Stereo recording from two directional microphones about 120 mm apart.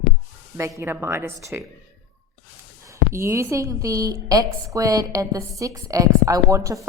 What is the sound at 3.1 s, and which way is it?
A woman's voice, 25° right (ahead or behind).